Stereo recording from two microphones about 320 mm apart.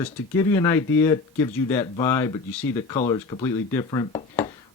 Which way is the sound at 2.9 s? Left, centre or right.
Centre.